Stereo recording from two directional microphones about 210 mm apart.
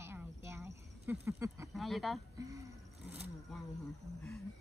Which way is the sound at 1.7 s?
Centre (ahead or behind).